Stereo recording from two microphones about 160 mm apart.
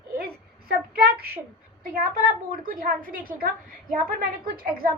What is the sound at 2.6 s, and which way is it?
A woman's voice, 60° right (ahead or behind).